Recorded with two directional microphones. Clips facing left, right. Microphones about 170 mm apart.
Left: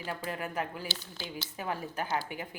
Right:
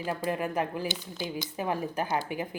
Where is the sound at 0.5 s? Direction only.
20° right (ahead or behind).